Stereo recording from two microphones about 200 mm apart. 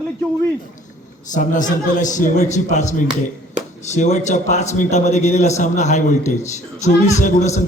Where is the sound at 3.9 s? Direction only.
35° left (ahead or behind).